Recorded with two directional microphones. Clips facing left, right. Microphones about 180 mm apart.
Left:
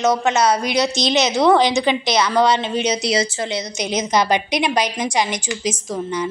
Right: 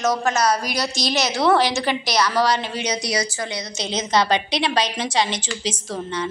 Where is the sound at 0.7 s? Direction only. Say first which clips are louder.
Left 5 dB; 20° left (ahead or behind).